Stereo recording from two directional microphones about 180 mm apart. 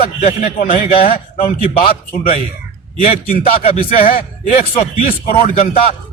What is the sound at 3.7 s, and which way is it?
Speech, 50° left (ahead or behind).